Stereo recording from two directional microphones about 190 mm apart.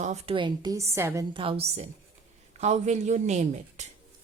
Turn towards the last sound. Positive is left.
turn(degrees=-35)  # may be behind; listen again after turning